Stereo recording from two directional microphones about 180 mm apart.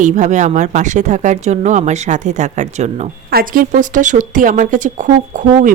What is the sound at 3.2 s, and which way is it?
Speech, 55° right (ahead or behind).